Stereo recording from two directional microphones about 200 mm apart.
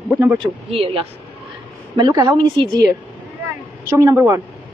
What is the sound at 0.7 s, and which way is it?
Speech, 30° right (ahead or behind).